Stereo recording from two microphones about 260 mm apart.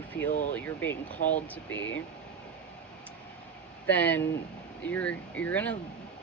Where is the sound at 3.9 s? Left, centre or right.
Centre.